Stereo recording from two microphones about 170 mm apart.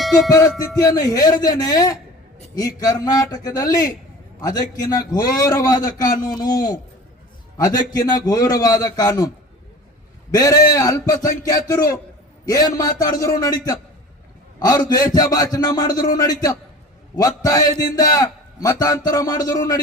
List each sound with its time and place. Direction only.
0.3 s a man's voice: 20° left (ahead or behind)
7.9 s a man's voice: 20° left (ahead or behind)
10.3 s a man's voice: 20° left (ahead or behind)
17.2 s a man's voice: 20° left (ahead or behind)